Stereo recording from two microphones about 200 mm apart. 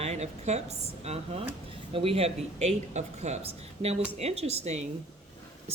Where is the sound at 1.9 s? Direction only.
30° right (ahead or behind).